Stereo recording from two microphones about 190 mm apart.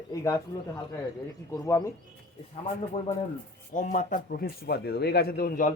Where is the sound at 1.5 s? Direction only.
15° left (ahead or behind).